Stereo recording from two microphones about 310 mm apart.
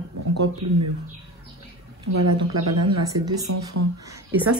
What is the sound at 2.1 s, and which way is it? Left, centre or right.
Speech, right.